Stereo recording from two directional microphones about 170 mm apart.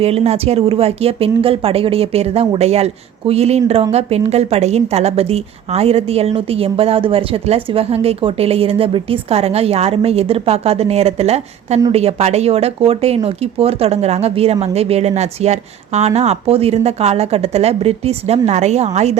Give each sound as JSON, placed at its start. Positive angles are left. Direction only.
{"t": 0.0, "sound": "a woman's voice", "side_deg": -35}